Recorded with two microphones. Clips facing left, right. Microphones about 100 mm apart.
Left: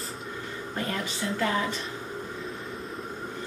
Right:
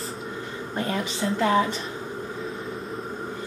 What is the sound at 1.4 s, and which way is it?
Speech, 25° right (ahead or behind).